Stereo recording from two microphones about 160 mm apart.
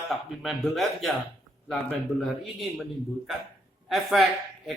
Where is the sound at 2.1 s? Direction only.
Centre (ahead or behind).